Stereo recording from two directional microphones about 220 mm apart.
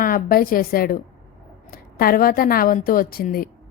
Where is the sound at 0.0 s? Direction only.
40° left (ahead or behind).